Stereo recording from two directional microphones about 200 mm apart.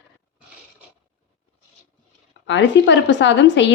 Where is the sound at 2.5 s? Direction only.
65° left (ahead or behind).